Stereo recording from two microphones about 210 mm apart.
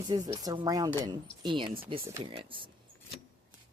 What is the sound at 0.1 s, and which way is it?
Speech, 20° right (ahead or behind).